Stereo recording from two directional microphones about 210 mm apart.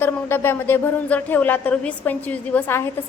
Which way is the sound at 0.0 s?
10° left (ahead or behind).